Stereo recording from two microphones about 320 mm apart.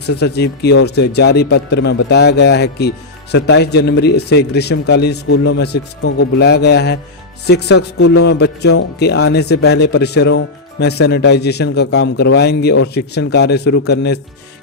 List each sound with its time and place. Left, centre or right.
0.0 s a man's voice: left